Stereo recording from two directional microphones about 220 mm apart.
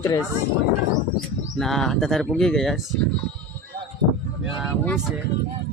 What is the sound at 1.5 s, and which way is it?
Speech, centre (ahead or behind).